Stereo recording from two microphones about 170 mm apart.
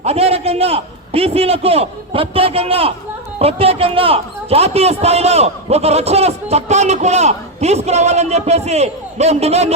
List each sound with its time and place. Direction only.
0.0 s a man's voice: 35° right (ahead or behind)